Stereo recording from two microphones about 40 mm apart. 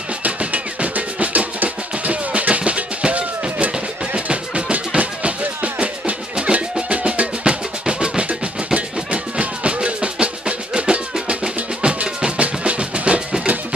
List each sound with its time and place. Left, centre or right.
0.2 s drum: right
4.7 s music: right